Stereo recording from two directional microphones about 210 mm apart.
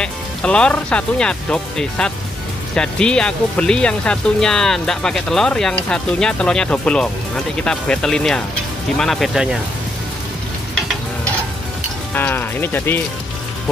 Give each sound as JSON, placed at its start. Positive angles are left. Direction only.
{"t": 0.0, "sound": "speech", "side_deg": 5}
{"t": 12.1, "sound": "speech", "side_deg": 10}